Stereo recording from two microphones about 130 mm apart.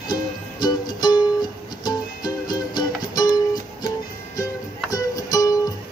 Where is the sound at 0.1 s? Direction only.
30° left (ahead or behind).